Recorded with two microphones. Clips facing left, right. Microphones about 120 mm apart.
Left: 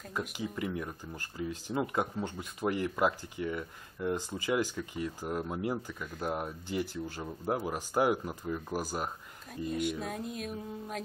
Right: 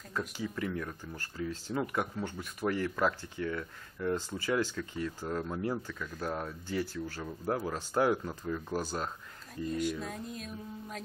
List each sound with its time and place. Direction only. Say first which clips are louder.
0.1 s speech: even; 15° left (ahead or behind)
10.3 s music: left 4 dB; 60° left (ahead or behind)